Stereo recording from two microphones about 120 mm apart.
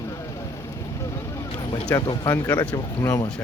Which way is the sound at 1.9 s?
35° left (ahead or behind).